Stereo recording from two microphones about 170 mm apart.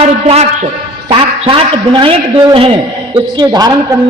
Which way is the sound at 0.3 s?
40° right (ahead or behind).